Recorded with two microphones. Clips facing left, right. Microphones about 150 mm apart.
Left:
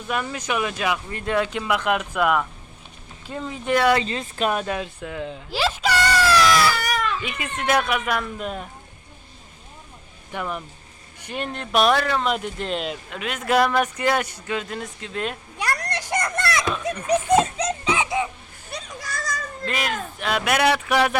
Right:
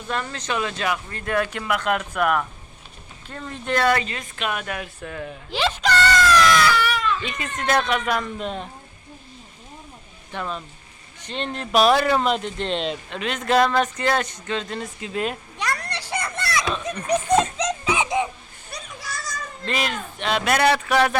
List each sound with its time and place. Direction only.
0.1 s speech: 10° left (ahead or behind)
4.0 s speech: 30° left (ahead or behind)
5.5 s a sound: 5° left (ahead or behind)
6.7 s baby cry: 45° left (ahead or behind)
7.2 s speech: 10° left (ahead or behind)
10.3 s speech: 10° left (ahead or behind); by 12.3 s 10° right (ahead or behind)
12.3 s speech: 10° left (ahead or behind)
16.2 s a sound: 45° left (ahead or behind)
17.2 s speech: 5° left (ahead or behind)
17.9 s a sound: 20° right (ahead or behind)
18.9 s a sound: 45° left (ahead or behind)
19.6 s speech: 5° left (ahead or behind)